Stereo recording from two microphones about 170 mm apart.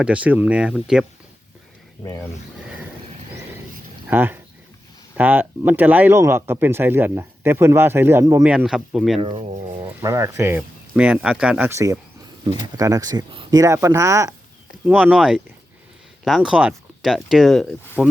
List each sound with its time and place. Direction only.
0.0 s speech: 10° right (ahead or behind)
4.1 s speech: 10° right (ahead or behind)
8.4 s speech: 5° right (ahead or behind)
9.2 s speech: 30° right (ahead or behind)
10.0 s speech: 20° right (ahead or behind); by 17.7 s centre (ahead or behind)